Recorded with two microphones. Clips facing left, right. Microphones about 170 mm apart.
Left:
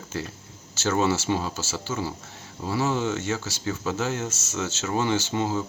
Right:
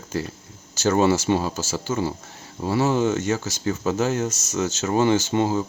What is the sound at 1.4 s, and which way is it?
Speech, 40° right (ahead or behind).